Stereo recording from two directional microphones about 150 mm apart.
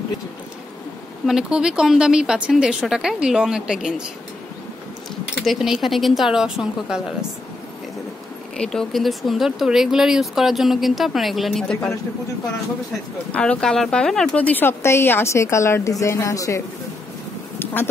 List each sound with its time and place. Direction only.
1.2 s speech: 5° right (ahead or behind)
5.4 s speech: centre (ahead or behind)
8.5 s speech: 5° left (ahead or behind)
13.3 s speech: 5° left (ahead or behind); by 16.6 s 20° left (ahead or behind)